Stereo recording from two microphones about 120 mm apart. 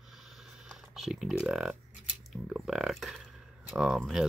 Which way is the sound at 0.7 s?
5° right (ahead or behind).